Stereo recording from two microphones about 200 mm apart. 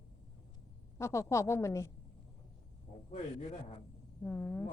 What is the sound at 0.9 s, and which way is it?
Speech, 15° left (ahead or behind).